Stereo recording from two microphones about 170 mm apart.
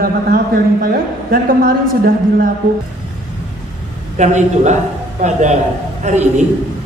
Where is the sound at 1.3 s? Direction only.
55° right (ahead or behind).